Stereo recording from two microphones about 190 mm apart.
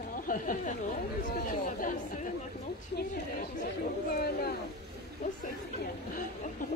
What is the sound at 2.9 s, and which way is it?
Chatter, 50° left (ahead or behind).